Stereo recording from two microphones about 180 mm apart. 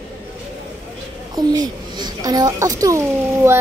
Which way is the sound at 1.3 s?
20° right (ahead or behind).